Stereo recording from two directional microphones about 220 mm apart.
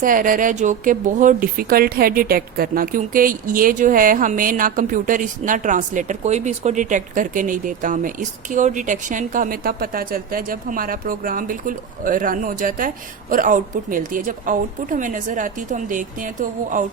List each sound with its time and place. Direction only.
0.0 s speech: 40° right (ahead or behind)